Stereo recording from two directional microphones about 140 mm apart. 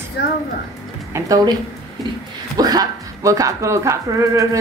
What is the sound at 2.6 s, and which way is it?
Speech, 25° right (ahead or behind).